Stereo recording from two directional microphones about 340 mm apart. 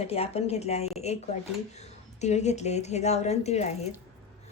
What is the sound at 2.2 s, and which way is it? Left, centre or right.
Speech, centre.